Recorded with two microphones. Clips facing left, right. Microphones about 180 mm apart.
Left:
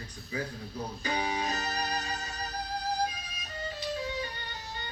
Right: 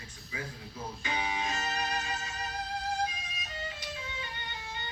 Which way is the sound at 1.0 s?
40° left (ahead or behind).